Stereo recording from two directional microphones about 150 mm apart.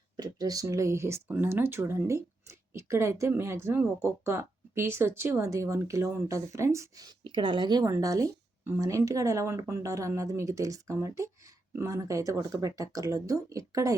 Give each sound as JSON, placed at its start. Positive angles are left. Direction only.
{"t": 0.2, "sound": "speech", "side_deg": -25}